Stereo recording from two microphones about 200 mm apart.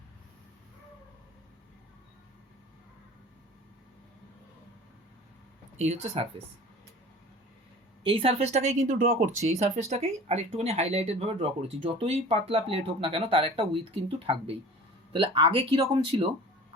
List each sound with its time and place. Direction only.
5.7 s speech: 35° right (ahead or behind)
8.0 s speech: 25° right (ahead or behind)